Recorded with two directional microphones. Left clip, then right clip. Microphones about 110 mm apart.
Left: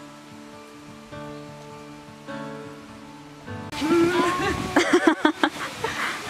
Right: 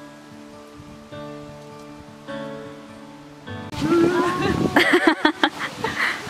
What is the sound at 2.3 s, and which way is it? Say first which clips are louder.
Music: right 3 dB; 30° right (ahead or behind).